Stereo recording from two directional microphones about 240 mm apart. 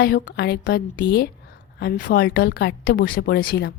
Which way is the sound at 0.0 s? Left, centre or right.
Left.